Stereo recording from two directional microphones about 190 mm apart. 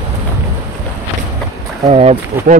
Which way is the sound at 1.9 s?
35° right (ahead or behind).